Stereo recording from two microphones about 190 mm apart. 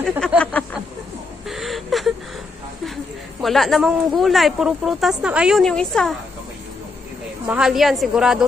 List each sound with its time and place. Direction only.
0.2 s speech: 5° left (ahead or behind)
1.5 s a sound: centre (ahead or behind)
3.4 s speech: centre (ahead or behind)
7.4 s speech: 5° right (ahead or behind)